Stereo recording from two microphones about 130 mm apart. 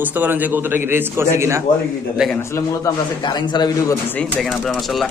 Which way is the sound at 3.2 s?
35° left (ahead or behind).